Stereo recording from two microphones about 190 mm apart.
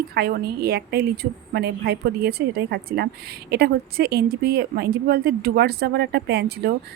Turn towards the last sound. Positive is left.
turn(degrees=-55)  # may be behind; listen again after turning